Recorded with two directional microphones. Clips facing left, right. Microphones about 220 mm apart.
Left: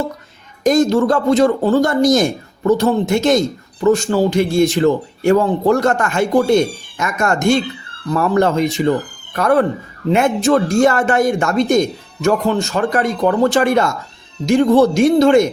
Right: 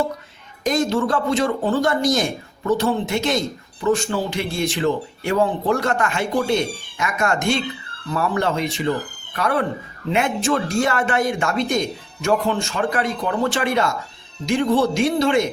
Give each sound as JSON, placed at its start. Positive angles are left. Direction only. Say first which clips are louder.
{"t": 0.6, "sound": "speech", "louder": "left 7 dB", "side_deg": 45}